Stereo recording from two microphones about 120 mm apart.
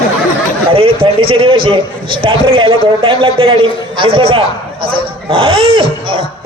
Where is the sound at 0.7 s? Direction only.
50° right (ahead or behind).